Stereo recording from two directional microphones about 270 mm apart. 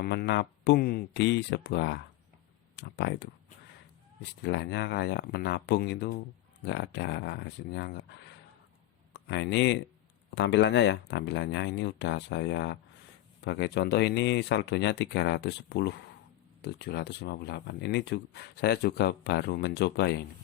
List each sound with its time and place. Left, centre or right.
0.0 s speech: left